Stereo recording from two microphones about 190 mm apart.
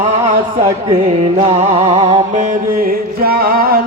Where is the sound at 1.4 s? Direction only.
30° right (ahead or behind).